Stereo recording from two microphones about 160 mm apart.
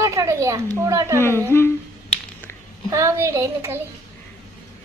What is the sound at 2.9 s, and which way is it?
Speech, 20° right (ahead or behind).